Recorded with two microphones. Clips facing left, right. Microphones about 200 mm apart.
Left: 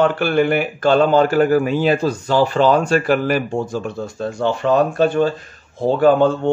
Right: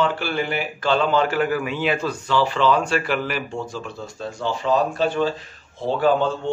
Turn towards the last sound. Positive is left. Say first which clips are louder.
# left 6 dB
turn(degrees=50)  # may be behind; listen again after turning